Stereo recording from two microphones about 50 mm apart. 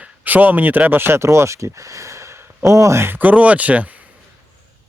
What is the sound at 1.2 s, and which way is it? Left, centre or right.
Speech, right.